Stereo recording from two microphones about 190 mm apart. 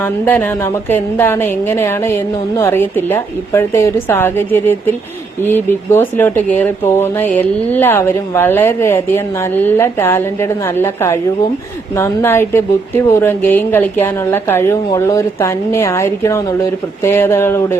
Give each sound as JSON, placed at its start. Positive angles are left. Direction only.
{"t": 0.0, "sound": "speech", "side_deg": 10}